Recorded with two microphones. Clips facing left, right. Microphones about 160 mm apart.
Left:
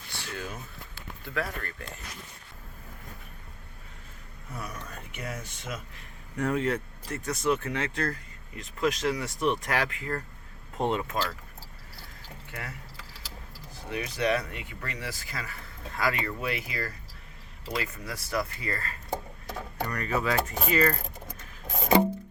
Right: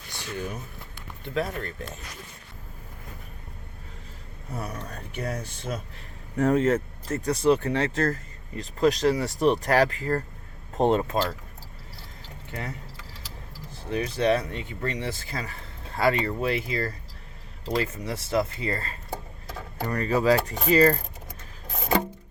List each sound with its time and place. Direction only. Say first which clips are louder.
0.1 s a sound: right 4 dB; 15° right (ahead or behind)
4.5 s speech: right 5 dB; 30° right (ahead or behind)
12.5 s speech: right 6 dB; 25° right (ahead or behind)
13.9 s speech: right 4 dB; 30° right (ahead or behind)